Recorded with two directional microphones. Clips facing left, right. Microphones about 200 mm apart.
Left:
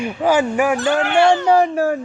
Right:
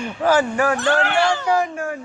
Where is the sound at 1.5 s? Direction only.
35° left (ahead or behind).